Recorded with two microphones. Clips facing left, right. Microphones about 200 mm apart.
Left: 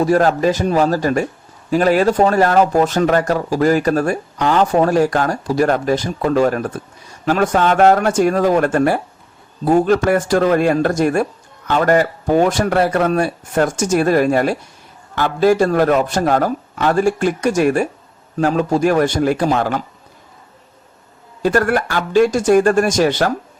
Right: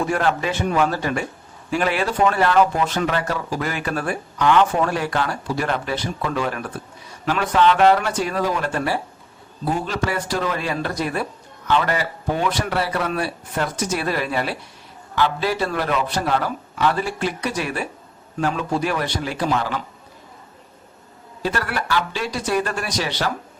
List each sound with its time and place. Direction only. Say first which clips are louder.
0.0 s speech: left 7 dB; 40° left (ahead or behind)
21.4 s speech: left 9 dB; 50° left (ahead or behind)